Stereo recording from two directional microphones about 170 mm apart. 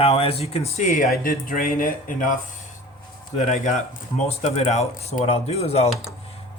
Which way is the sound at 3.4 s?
45° left (ahead or behind).